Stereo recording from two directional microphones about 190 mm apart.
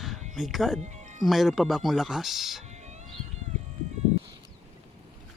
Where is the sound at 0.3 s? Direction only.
Centre (ahead or behind).